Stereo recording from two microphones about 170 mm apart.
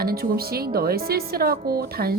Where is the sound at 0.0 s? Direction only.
60° right (ahead or behind).